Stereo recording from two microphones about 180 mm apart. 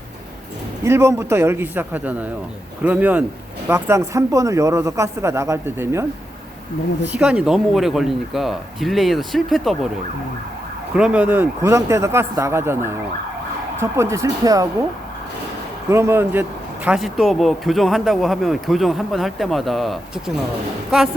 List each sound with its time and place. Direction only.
0.9 s speech: 15° right (ahead or behind)
7.1 s speech: 5° right (ahead or behind)
10.9 s speech: 5° right (ahead or behind)
15.9 s speech: 15° right (ahead or behind)